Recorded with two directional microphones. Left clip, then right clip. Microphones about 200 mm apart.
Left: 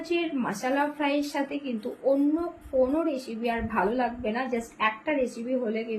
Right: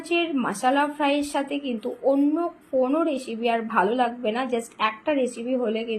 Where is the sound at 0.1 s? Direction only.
20° right (ahead or behind).